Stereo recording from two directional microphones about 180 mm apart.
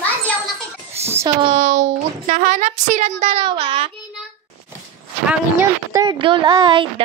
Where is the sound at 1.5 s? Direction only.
40° right (ahead or behind).